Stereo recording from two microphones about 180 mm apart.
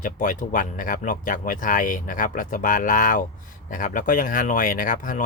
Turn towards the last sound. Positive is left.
turn(degrees=45)  # may be behind; listen again after turning